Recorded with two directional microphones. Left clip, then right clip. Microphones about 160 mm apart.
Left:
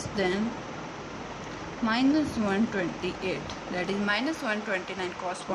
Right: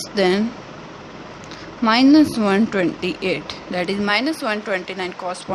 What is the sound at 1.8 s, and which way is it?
Speech, 55° right (ahead or behind).